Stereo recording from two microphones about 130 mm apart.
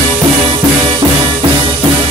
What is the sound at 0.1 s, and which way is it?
Music, 45° right (ahead or behind).